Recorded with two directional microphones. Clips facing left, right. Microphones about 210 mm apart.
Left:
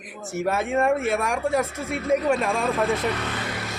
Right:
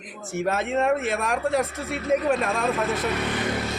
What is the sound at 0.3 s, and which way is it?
A woman's voice, 10° left (ahead or behind).